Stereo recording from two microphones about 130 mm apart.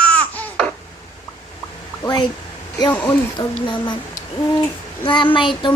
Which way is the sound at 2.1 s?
30° left (ahead or behind).